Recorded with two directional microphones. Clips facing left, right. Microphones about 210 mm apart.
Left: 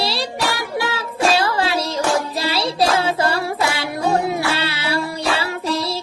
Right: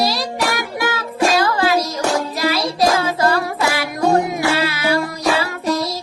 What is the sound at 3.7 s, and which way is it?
Music, 30° left (ahead or behind).